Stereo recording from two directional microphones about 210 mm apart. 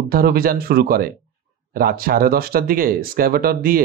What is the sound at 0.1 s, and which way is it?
Speech, 45° right (ahead or behind).